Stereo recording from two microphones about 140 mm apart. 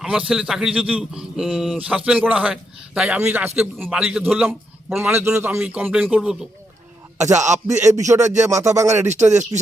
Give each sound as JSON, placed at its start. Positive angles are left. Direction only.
{"t": 0.0, "sound": "a man's voice", "side_deg": -5}
{"t": 3.2, "sound": "a man's voice", "side_deg": -15}
{"t": 7.3, "sound": "speech", "side_deg": -55}
{"t": 7.7, "sound": "speech", "side_deg": -20}